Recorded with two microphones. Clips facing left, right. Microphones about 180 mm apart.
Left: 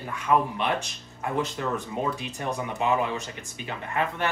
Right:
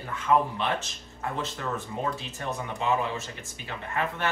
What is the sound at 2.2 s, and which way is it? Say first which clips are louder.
Speech: left 3 dB; 15° left (ahead or behind).